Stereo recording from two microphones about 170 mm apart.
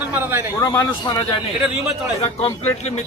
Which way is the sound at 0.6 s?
20° left (ahead or behind).